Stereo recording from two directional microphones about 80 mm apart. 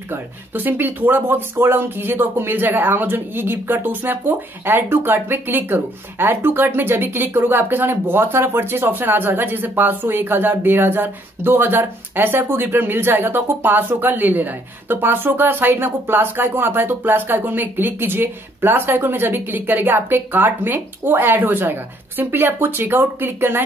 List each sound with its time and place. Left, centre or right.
0.1 s speech: right